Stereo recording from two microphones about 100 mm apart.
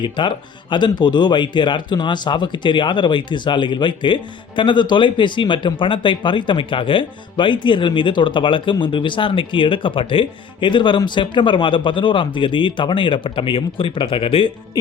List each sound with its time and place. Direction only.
0.0 s speech: 55° left (ahead or behind)